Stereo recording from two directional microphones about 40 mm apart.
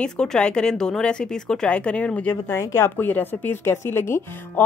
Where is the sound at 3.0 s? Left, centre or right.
Left.